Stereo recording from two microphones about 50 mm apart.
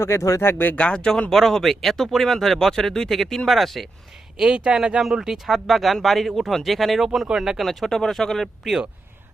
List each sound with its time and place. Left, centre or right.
0.0 s speech: left
0.4 s speech: left
0.8 s speech: centre
1.3 s speech: centre
4.4 s speech: centre
7.7 s speech: centre